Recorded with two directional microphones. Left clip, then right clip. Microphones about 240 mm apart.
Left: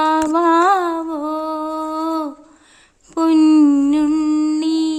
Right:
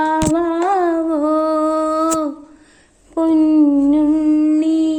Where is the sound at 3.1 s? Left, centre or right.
Left.